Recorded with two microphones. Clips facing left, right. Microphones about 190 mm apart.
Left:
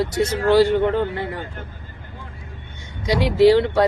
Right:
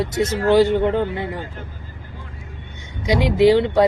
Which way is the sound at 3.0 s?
20° right (ahead or behind).